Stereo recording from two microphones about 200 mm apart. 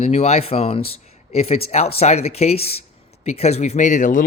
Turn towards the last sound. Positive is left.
turn(degrees=40)  # may be behind; listen again after turning